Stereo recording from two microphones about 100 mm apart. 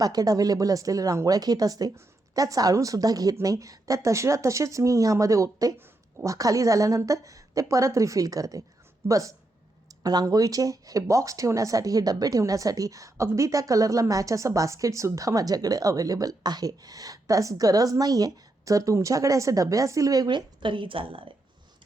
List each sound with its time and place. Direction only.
0.0 s speech: 40° right (ahead or behind); by 21.3 s 65° right (ahead or behind)